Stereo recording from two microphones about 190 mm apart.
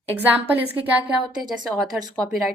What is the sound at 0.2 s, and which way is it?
A woman's voice, 10° right (ahead or behind).